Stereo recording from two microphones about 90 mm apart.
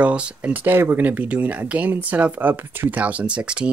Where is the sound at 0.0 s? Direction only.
10° right (ahead or behind).